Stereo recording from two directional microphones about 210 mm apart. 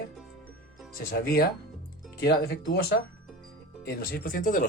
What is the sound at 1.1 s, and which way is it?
Speech, 45° left (ahead or behind).